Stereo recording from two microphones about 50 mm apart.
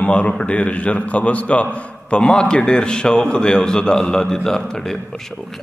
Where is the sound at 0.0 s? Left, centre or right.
Left.